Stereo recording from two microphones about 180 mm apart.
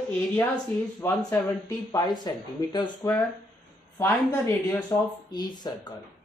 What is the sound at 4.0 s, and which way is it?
Speech, 15° left (ahead or behind).